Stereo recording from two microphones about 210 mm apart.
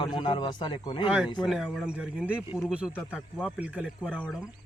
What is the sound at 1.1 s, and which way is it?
Speech, 5° right (ahead or behind).